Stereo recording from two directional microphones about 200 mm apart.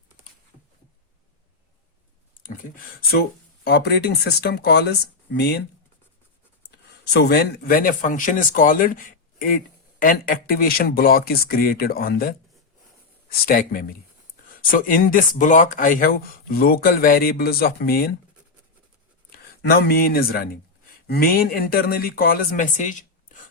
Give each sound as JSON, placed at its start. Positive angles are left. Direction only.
{"t": 3.6, "sound": "speech", "side_deg": 55}
{"t": 6.7, "sound": "speech", "side_deg": 55}
{"t": 13.4, "sound": "speech", "side_deg": 45}
{"t": 19.6, "sound": "speech", "side_deg": 50}